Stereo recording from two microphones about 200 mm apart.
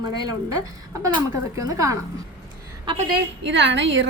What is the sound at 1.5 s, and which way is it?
Speech, 15° right (ahead or behind).